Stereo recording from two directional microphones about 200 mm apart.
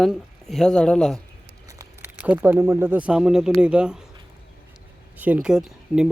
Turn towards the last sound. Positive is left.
turn(degrees=-5)  # may be behind; listen again after turning